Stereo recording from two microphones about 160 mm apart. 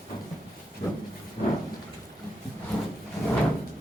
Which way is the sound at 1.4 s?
55° left (ahead or behind).